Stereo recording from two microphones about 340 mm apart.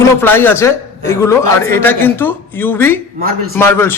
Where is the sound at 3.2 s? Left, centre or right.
Right.